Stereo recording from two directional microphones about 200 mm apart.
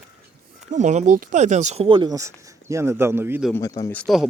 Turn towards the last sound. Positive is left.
turn(degrees=5)  # may be behind; listen again after turning